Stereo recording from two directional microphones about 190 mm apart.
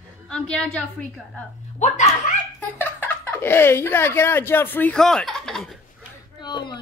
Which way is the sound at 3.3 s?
10° left (ahead or behind).